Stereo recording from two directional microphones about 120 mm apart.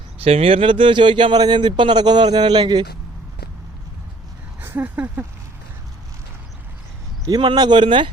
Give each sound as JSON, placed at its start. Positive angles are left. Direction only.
{"t": 0.2, "sound": "speech", "side_deg": -55}
{"t": 4.6, "sound": "speech", "side_deg": -15}
{"t": 7.3, "sound": "speech", "side_deg": -35}